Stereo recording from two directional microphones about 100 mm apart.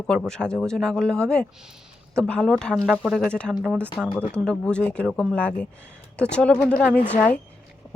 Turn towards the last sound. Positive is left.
turn(degrees=15)  # may be behind; listen again after turning